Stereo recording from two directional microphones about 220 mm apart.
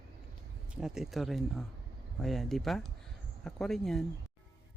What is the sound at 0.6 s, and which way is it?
Speech, centre (ahead or behind).